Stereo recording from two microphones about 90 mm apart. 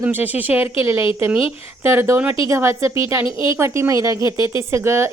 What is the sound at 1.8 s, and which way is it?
A woman's voice, 30° right (ahead or behind).